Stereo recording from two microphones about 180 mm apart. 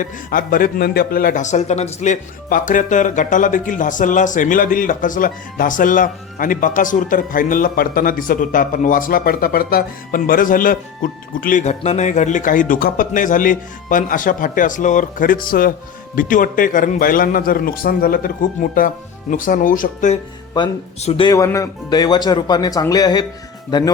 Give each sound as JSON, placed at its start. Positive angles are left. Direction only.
{"t": 0.0, "sound": "a man's voice", "side_deg": 50}
{"t": 21.0, "sound": "speech", "side_deg": 30}